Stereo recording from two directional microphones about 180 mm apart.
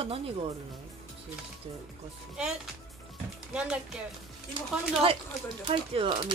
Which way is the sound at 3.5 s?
5° right (ahead or behind).